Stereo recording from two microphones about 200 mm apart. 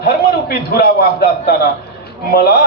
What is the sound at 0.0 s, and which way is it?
A man's voice, 50° left (ahead or behind).